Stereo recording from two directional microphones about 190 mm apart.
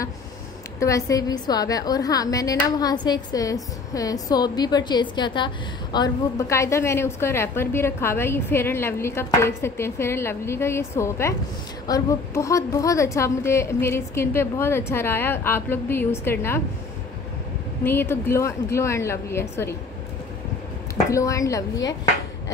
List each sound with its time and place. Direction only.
0.7 s a woman's voice: 15° left (ahead or behind)
17.8 s a woman's voice: 10° left (ahead or behind)
20.9 s a woman's voice: 15° left (ahead or behind)